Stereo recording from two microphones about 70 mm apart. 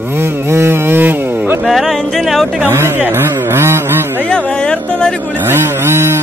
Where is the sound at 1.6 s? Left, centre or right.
Centre.